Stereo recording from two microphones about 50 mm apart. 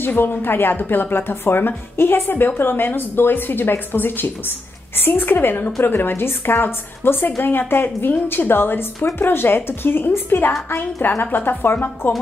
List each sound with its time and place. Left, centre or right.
0.0 s speech: left